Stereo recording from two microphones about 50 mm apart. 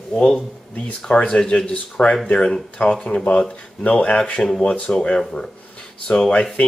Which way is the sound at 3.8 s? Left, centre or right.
Left.